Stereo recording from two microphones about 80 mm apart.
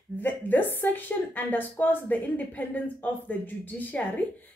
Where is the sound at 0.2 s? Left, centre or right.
Left.